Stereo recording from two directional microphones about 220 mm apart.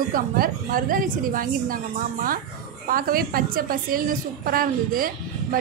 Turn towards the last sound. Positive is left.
turn(degrees=-40)  # may be behind; listen again after turning